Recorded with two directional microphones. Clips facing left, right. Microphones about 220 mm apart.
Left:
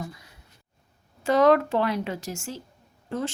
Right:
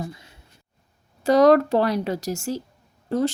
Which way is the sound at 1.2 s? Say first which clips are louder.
Right 4 dB; 35° right (ahead or behind).